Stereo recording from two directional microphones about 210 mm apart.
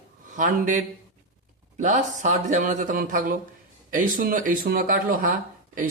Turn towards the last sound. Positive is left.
turn(degrees=-40)  # may be behind; listen again after turning